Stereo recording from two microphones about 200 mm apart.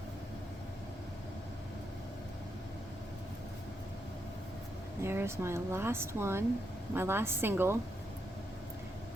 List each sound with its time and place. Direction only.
5.0 s speech: 10° right (ahead or behind)